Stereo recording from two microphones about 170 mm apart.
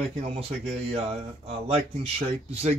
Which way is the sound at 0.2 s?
40° right (ahead or behind).